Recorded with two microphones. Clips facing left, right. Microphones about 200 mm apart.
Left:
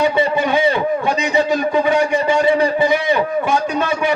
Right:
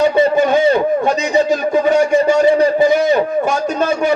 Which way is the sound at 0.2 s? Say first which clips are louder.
Right 4 dB; 40° right (ahead or behind).